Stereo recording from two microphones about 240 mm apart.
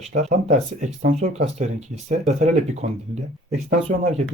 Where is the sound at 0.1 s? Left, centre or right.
Right.